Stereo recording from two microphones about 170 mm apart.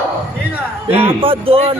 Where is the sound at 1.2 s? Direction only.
35° right (ahead or behind).